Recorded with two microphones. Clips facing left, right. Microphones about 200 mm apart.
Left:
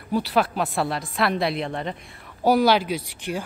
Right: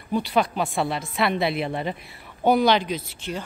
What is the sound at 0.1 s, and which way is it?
A woman's voice, centre (ahead or behind).